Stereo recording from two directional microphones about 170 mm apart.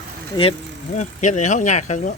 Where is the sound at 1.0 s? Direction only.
45° left (ahead or behind).